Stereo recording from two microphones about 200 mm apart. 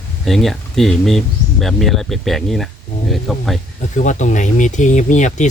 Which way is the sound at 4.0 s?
40° left (ahead or behind).